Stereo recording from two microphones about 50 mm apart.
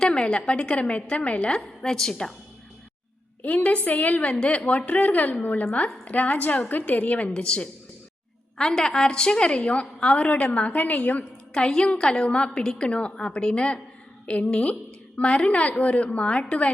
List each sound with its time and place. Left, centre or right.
0.0 s a woman's voice: centre
3.4 s a woman's voice: left
11.5 s a woman's voice: centre